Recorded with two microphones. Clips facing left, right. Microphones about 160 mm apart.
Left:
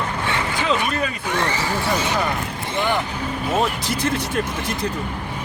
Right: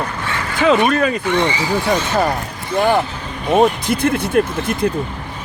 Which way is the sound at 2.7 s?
50° right (ahead or behind).